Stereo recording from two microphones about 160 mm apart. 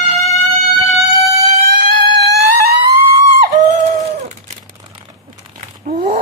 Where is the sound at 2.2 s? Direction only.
75° right (ahead or behind).